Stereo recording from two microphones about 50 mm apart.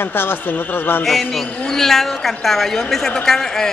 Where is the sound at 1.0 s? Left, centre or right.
Centre.